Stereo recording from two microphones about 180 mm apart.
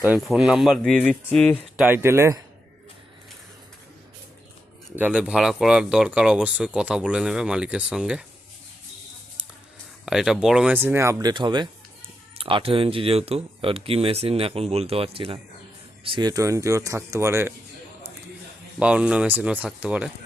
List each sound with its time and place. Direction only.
0.0 s speech: 5° right (ahead or behind)
4.9 s speech: 10° right (ahead or behind)
9.4 s a sound: 10° right (ahead or behind)
10.1 s speech: centre (ahead or behind)
18.8 s speech: 5° right (ahead or behind)